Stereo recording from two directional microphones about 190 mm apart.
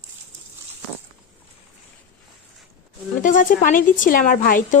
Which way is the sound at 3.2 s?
45° left (ahead or behind).